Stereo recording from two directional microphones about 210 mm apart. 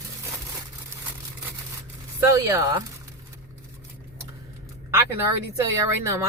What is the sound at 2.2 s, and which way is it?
Speech, 15° right (ahead or behind).